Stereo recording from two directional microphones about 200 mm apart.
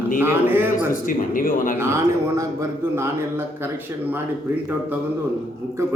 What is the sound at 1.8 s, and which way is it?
A man's voice, 15° right (ahead or behind).